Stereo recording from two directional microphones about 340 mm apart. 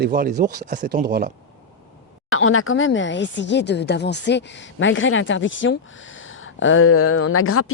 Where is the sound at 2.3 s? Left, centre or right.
Left.